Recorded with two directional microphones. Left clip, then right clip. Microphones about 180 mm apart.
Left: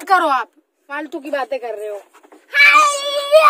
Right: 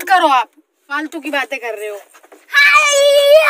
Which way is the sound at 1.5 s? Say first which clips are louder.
Right 1 dB; 30° left (ahead or behind).